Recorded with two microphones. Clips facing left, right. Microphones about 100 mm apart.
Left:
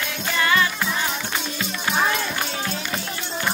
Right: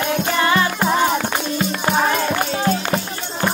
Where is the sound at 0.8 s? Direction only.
45° right (ahead or behind).